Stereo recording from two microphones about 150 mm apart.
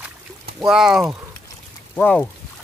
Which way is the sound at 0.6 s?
5° right (ahead or behind).